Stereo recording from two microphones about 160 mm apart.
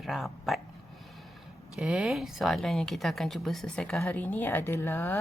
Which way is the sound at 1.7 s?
5° right (ahead or behind).